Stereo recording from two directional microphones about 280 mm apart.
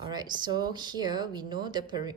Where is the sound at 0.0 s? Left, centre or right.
Centre.